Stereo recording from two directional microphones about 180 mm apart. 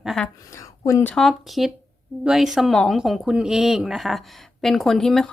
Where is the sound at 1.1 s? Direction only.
Centre (ahead or behind).